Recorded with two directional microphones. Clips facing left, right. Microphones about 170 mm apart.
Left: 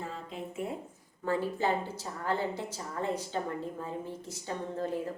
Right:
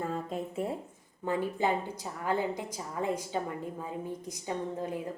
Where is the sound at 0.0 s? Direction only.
45° right (ahead or behind).